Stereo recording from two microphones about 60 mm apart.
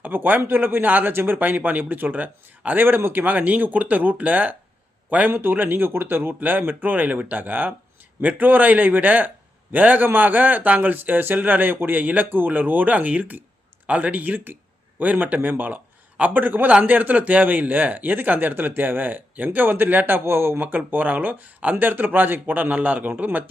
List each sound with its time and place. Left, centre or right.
0.0 s a man's voice: right
20.6 s a man's voice: right